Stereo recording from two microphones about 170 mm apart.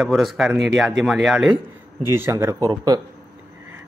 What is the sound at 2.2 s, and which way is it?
Speech, 15° right (ahead or behind).